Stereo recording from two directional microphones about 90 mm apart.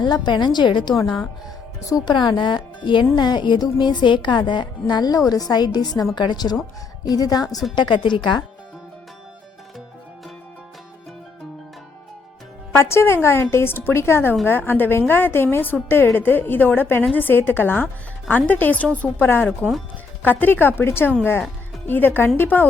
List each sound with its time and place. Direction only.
0.0 s speech: 60° left (ahead or behind)
1.9 s a woman's voice: 45° left (ahead or behind)
2.1 s a woman's voice: 60° left (ahead or behind)
7.8 s speech: 60° left (ahead or behind)
12.7 s a woman's voice: 30° left (ahead or behind)